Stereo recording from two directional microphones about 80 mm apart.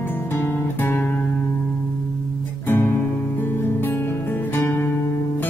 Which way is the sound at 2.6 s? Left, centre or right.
Left.